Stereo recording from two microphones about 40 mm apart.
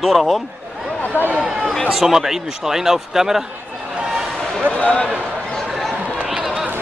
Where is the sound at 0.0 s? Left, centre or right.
Centre.